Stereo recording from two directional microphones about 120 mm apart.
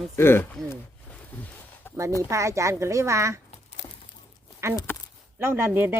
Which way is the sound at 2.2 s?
25° right (ahead or behind).